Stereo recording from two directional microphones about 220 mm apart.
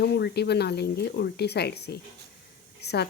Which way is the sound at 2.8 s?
50° left (ahead or behind).